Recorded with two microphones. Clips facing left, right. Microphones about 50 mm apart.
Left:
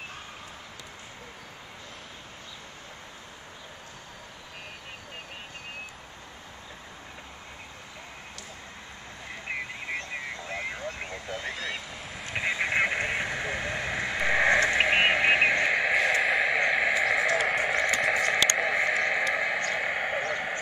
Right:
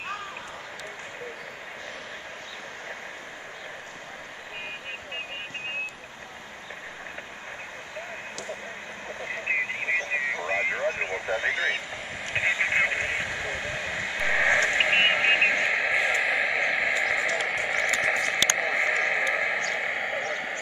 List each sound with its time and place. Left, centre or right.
9.3 s vehicle: right
12.2 s vehicle: centre
14.7 s radio: centre
19.7 s a sound: centre